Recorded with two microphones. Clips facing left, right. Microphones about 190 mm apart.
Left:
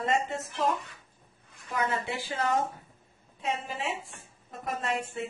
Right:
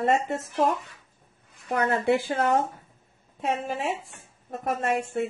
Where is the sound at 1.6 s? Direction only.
50° right (ahead or behind).